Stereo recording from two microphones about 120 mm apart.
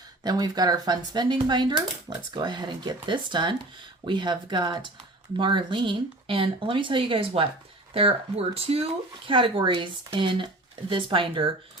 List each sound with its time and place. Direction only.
0.2 s speech: 35° right (ahead or behind)